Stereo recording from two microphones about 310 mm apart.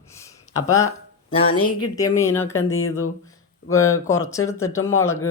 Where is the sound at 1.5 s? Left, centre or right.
Left.